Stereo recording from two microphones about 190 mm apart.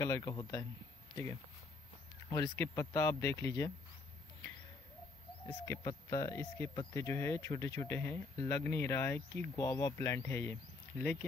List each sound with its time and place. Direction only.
0.0 s speech: 20° left (ahead or behind)
2.3 s speech: 15° left (ahead or behind)
5.5 s speech: 15° left (ahead or behind)